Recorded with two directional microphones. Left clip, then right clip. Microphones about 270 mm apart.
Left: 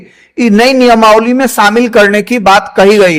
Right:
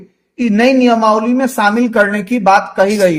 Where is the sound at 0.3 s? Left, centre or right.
Left.